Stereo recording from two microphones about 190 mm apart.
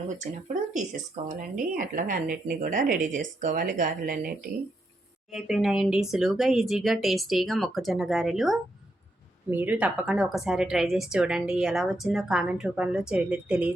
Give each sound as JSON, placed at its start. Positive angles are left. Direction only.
{"t": 0.4, "sound": "speech", "side_deg": -40}
{"t": 5.3, "sound": "a woman's voice", "side_deg": 0}